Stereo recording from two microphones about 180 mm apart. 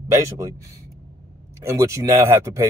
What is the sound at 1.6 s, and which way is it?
Speech, 15° right (ahead or behind).